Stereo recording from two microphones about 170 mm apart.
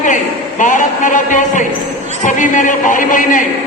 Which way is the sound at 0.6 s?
50° left (ahead or behind).